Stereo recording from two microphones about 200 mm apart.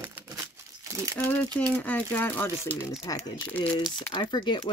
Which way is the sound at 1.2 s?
10° left (ahead or behind).